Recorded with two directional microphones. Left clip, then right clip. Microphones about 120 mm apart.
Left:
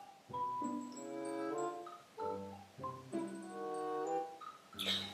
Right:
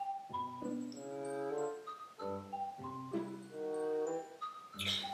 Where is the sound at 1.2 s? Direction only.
Centre (ahead or behind).